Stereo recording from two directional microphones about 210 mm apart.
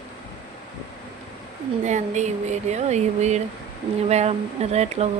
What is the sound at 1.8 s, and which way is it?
Speech, 35° right (ahead or behind).